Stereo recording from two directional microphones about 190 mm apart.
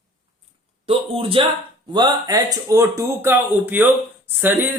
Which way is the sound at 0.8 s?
30° right (ahead or behind).